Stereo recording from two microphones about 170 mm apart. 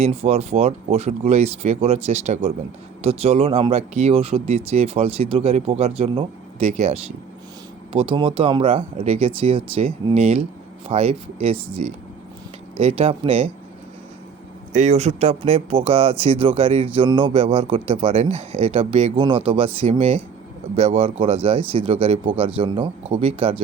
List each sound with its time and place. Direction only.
0.0 s speech: 35° right (ahead or behind)
14.7 s speech: 45° right (ahead or behind)